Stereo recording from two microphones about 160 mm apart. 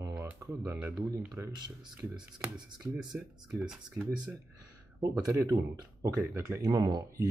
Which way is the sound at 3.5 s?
5° right (ahead or behind).